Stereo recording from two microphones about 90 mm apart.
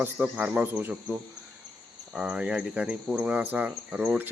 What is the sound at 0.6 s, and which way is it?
Speech, 25° right (ahead or behind).